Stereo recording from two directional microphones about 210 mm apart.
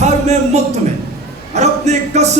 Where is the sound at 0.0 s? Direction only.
30° right (ahead or behind).